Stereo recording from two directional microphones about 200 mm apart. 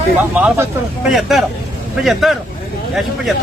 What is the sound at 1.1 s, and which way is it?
Speech, centre (ahead or behind).